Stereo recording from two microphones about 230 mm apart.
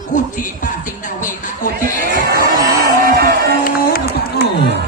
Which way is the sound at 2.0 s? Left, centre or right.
Right.